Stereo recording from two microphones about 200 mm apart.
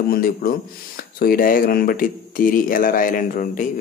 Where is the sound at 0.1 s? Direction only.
45° left (ahead or behind).